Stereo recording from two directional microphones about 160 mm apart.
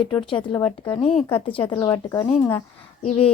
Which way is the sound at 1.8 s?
20° left (ahead or behind).